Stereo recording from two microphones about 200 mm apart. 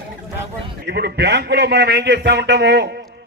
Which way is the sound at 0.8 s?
55° right (ahead or behind).